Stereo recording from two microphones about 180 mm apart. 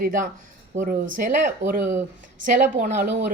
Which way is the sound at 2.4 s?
45° right (ahead or behind).